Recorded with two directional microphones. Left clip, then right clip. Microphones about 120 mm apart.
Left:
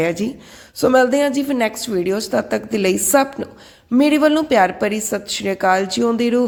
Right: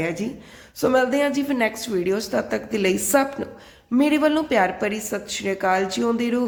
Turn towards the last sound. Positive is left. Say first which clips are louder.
# left 6 dB
turn(degrees=35)  # may be behind; listen again after turning